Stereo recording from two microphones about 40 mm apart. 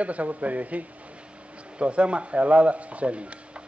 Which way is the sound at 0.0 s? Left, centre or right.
Right.